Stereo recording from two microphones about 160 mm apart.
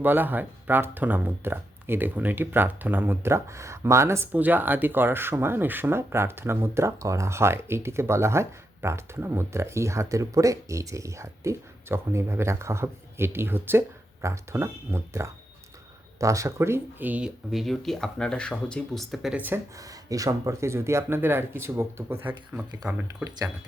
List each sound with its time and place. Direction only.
0.0 s speech: 10° right (ahead or behind)
20.1 s speech: 20° right (ahead or behind)